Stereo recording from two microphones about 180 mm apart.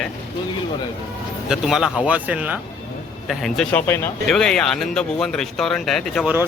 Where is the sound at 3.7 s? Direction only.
10° left (ahead or behind).